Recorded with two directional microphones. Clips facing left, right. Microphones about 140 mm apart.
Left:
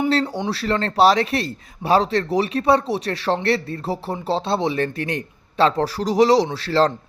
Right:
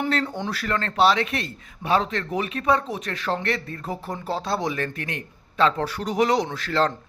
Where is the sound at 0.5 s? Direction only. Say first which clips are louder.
Left 6 dB; 30° left (ahead or behind).